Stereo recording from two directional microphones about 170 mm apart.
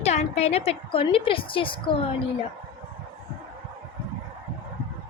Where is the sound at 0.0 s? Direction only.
40° left (ahead or behind).